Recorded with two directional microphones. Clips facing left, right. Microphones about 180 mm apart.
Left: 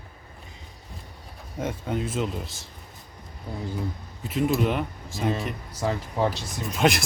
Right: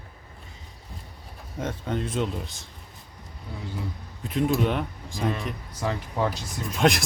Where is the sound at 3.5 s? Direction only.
45° left (ahead or behind).